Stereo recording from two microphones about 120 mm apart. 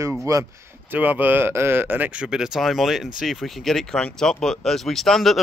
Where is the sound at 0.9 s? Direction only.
15° right (ahead or behind).